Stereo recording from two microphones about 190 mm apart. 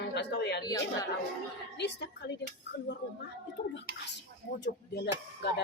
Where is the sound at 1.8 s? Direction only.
60° left (ahead or behind).